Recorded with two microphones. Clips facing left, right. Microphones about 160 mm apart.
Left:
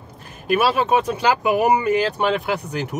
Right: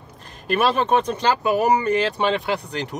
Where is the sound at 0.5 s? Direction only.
5° left (ahead or behind).